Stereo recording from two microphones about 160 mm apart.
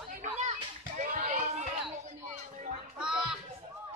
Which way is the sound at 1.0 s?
50° right (ahead or behind).